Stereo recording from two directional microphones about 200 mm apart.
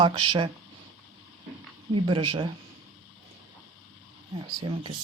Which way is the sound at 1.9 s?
25° right (ahead or behind).